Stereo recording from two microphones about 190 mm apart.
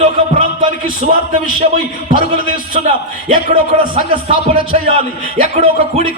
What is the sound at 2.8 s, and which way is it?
A man's voice, 35° right (ahead or behind).